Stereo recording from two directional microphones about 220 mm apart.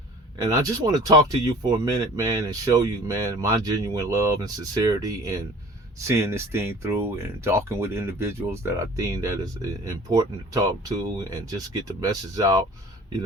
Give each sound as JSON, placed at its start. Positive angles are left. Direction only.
{"t": 0.4, "sound": "speech", "side_deg": -15}